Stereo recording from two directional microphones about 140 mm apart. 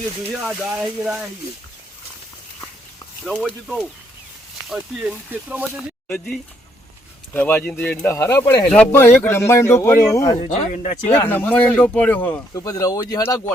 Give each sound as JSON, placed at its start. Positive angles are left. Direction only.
{"t": 0.4, "sound": "speech", "side_deg": -5}
{"t": 3.2, "sound": "speech", "side_deg": 0}
{"t": 4.7, "sound": "speech", "side_deg": -10}
{"t": 6.1, "sound": "speech", "side_deg": 10}
{"t": 10.4, "sound": "speech", "side_deg": 55}
{"t": 11.3, "sound": "speech", "side_deg": 15}
{"t": 12.5, "sound": "speech", "side_deg": 25}